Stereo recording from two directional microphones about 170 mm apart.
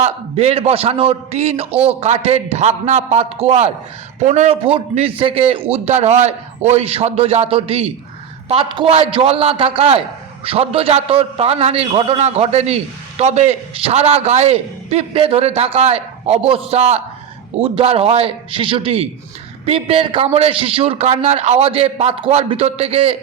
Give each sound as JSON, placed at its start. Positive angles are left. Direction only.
{"t": 0.0, "sound": "a man's voice", "side_deg": -40}